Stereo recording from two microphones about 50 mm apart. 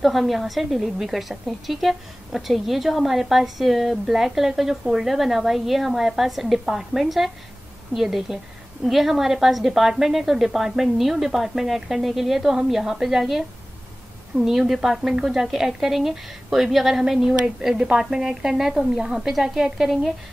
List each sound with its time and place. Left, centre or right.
0.0 s a woman's voice: centre